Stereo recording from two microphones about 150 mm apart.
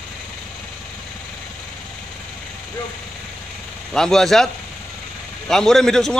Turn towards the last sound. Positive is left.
turn(degrees=0)  # may be behind; listen again after turning